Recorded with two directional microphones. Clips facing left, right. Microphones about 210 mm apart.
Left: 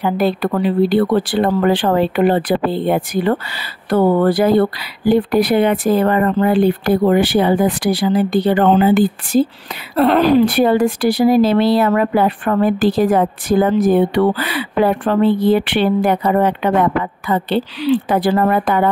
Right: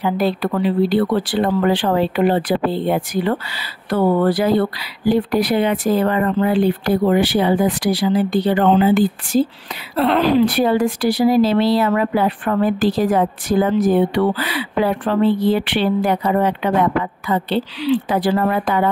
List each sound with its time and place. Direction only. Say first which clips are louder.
0.0 s speech: left 2 dB; 55° left (ahead or behind)